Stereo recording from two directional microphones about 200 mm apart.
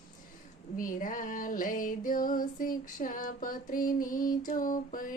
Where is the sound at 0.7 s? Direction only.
40° left (ahead or behind).